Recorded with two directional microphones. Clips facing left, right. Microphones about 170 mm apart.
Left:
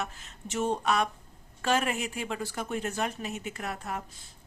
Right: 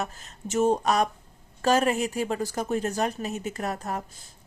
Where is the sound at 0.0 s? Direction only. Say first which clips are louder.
Right 4 dB; 40° right (ahead or behind).